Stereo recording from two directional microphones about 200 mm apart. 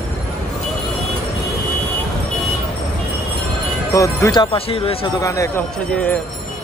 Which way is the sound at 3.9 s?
15° left (ahead or behind).